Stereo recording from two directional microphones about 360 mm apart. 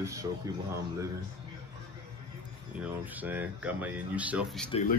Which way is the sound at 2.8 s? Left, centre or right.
Centre.